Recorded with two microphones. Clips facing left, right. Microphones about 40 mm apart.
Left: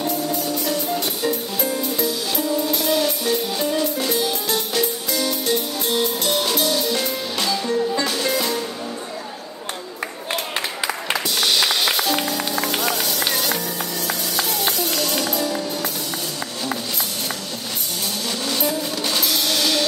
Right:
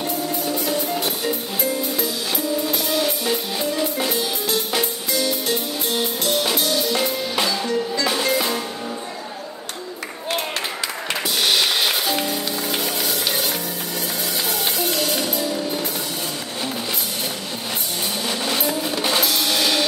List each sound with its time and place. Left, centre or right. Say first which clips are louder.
0.5 s music: even; right
1.6 s music: even; centre
6.2 s music: even; centre
11.2 s music: right 1 dB; centre
14.8 s music: even; centre
18.6 s drum: right 1 dB; centre
19.4 s music: right 1 dB; centre